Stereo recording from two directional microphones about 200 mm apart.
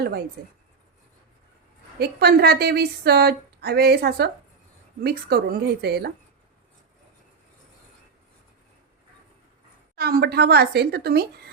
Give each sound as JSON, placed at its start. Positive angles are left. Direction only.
{"t": 2.0, "sound": "a woman's voice", "side_deg": -50}
{"t": 9.9, "sound": "a woman's voice", "side_deg": -50}